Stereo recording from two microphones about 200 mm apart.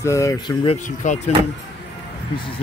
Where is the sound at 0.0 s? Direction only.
15° left (ahead or behind).